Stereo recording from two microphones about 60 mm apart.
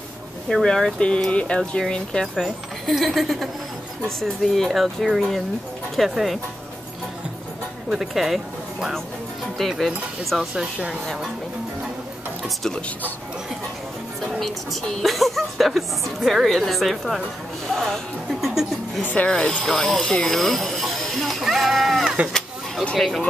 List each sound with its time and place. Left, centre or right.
0.5 s speech: centre
2.4 s a woman's voice: centre
7.9 s a woman's voice: centre
9.6 s a woman's voice: centre
10.5 s speech: centre
12.4 s speech: centre
14.2 s a woman's voice: centre
18.5 s speech: centre
19.2 s a woman's voice: centre